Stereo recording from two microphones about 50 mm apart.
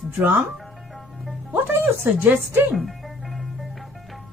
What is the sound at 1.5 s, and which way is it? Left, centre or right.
Speech, right.